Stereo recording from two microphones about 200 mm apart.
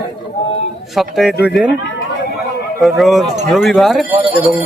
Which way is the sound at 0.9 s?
Centre (ahead or behind).